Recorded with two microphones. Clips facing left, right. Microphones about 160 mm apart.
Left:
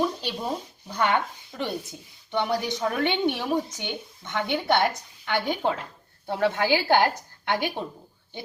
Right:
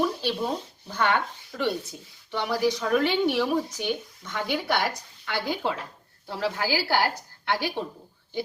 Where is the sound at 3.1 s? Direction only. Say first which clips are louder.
Right 1 dB; 25° left (ahead or behind).